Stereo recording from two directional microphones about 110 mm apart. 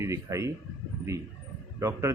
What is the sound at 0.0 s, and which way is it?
Speech, 25° right (ahead or behind).